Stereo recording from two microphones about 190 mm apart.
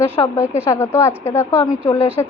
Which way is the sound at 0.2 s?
20° left (ahead or behind).